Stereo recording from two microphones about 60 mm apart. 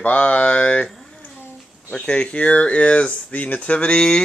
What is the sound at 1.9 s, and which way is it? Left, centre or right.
Speech, centre.